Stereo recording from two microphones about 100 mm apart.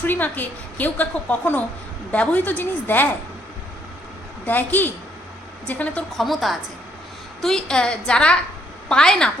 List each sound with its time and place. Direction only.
0.0 s a woman's voice: 20° left (ahead or behind)
4.4 s a woman's voice: 20° left (ahead or behind)
6.1 s a woman's voice: centre (ahead or behind)